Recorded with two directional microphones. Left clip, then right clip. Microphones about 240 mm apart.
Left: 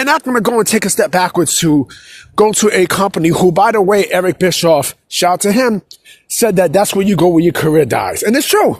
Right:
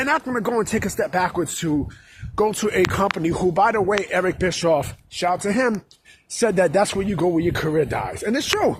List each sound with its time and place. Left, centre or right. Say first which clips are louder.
0.0 s speech: left 9 dB; left